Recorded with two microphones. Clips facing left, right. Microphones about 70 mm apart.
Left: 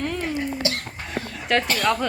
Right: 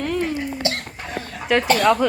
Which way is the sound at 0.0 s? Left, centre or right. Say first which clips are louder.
Right 3 dB; centre.